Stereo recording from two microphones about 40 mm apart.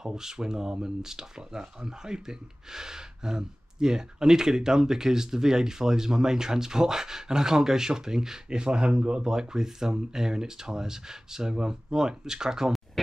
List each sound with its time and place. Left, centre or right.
0.0 s speech: centre